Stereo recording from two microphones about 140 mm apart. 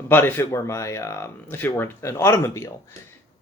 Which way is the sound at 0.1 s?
15° left (ahead or behind).